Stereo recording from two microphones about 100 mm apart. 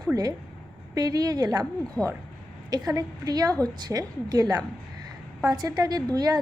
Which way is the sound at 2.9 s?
40° right (ahead or behind).